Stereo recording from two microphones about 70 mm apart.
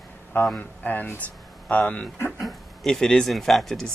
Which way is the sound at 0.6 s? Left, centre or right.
Left.